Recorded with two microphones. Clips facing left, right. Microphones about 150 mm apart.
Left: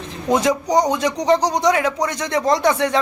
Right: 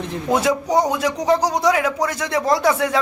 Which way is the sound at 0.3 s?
5° right (ahead or behind).